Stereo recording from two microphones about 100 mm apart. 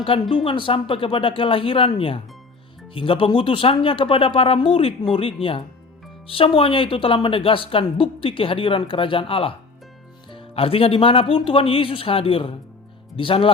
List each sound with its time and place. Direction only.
0.2 s speech: 55° left (ahead or behind)